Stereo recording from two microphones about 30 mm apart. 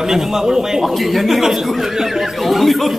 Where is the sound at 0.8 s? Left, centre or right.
Centre.